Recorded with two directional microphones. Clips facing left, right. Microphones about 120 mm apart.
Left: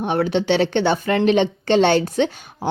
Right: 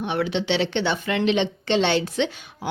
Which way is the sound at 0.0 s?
45° left (ahead or behind).